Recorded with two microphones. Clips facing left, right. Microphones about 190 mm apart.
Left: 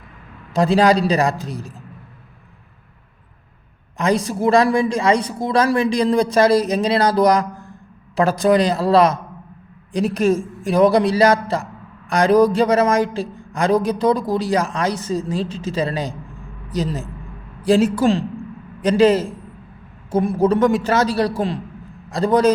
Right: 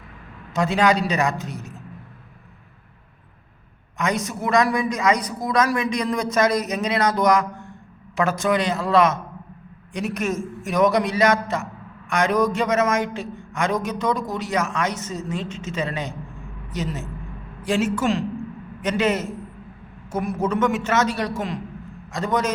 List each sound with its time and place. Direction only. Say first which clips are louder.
0.5 s a man's voice: left 5 dB; 35° left (ahead or behind)
3.9 s a man's voice: left 6 dB; 30° left (ahead or behind)